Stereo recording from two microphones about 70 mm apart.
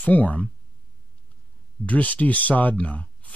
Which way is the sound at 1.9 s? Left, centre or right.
Left.